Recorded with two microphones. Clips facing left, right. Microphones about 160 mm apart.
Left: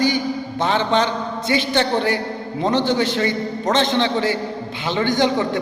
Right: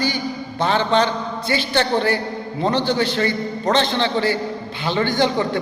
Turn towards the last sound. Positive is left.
turn(degrees=15)  # may be behind; listen again after turning